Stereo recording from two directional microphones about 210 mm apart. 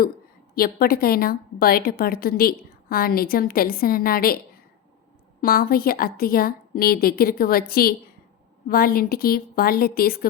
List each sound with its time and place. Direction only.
0.5 s a woman's voice: 45° left (ahead or behind)
5.4 s a woman's voice: 45° left (ahead or behind)